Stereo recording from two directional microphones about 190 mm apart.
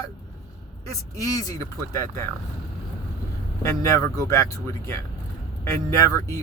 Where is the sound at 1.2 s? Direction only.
20° left (ahead or behind).